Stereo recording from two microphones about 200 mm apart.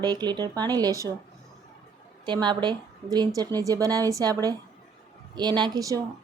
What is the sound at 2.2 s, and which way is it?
A woman's voice, 20° right (ahead or behind).